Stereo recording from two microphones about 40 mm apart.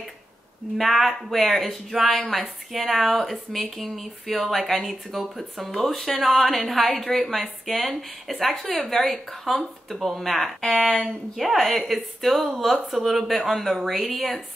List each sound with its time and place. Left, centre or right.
0.7 s a woman's voice: centre
10.6 s speech: left
11.3 s a woman's voice: centre